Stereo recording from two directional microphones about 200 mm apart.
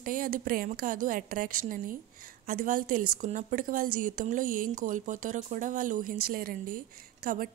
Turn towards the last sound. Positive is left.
turn(degrees=-45)  # may be behind; listen again after turning